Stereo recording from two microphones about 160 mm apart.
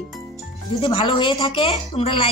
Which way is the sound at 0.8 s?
30° left (ahead or behind).